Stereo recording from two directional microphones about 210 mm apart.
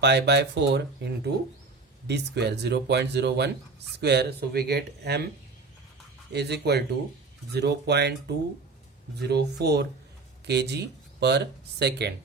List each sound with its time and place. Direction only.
0.0 s speech: 55° right (ahead or behind)
6.3 s speech: 50° right (ahead or behind)